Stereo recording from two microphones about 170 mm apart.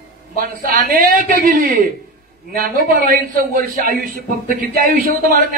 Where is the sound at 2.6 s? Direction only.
60° right (ahead or behind).